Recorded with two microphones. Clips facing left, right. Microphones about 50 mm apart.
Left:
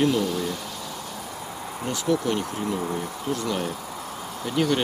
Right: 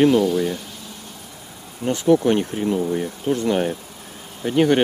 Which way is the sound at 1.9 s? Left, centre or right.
Right.